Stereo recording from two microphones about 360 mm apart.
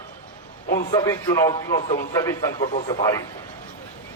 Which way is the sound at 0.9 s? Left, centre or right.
Centre.